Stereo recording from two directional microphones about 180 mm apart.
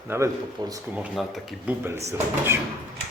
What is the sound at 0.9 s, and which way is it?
Speech, 5° right (ahead or behind).